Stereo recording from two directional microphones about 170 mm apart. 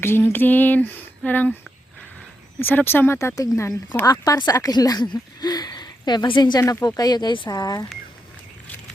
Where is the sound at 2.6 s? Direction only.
10° left (ahead or behind).